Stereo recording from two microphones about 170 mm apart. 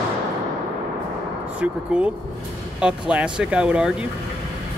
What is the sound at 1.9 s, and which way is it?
Speech, 5° right (ahead or behind).